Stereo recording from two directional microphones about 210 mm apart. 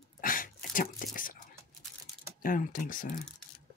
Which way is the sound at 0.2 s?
40° left (ahead or behind).